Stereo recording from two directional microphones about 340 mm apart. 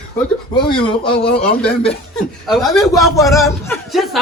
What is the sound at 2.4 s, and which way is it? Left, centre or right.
A man's voice, centre.